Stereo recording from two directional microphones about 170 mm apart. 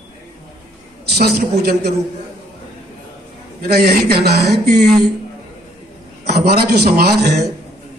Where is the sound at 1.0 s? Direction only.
70° right (ahead or behind).